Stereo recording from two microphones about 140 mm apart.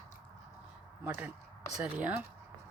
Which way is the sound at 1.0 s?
15° right (ahead or behind).